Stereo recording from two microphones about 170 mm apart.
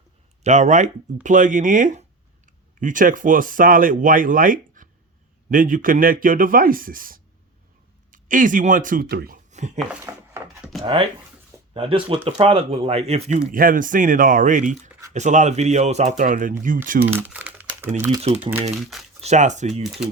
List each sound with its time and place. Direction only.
0.4 s speech: 45° right (ahead or behind); by 9.4 s 65° right (ahead or behind)
9.5 s a sound: 45° right (ahead or behind)
10.0 s a sound: 15° right (ahead or behind)
11.7 s speech: 35° right (ahead or behind)
13.5 s speech: 55° right (ahead or behind)
17.1 s crumpling: 10° right (ahead or behind)
18.2 s speech: 35° right (ahead or behind)
18.8 s speech: centre (ahead or behind)
19.2 s speech: 45° right (ahead or behind)
19.8 s speech: centre (ahead or behind)